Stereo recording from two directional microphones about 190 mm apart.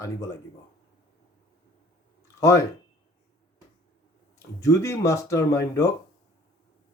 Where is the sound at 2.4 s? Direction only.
15° left (ahead or behind).